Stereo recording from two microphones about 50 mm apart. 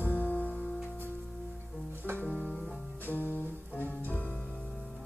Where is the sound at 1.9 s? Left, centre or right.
Right.